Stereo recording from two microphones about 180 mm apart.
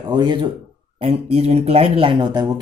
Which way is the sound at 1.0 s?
35° right (ahead or behind).